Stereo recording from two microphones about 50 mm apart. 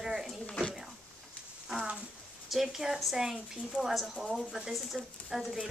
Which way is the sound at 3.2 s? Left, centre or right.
Centre.